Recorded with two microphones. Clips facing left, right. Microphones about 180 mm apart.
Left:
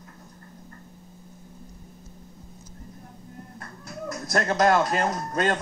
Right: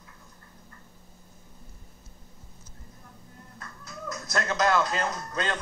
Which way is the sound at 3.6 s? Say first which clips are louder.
Left 4 dB; 45° left (ahead or behind).